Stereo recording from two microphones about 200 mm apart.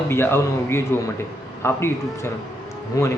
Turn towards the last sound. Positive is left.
turn(degrees=15)  # may be behind; listen again after turning